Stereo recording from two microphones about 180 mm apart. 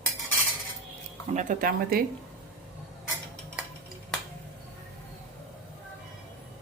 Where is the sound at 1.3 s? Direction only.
45° right (ahead or behind).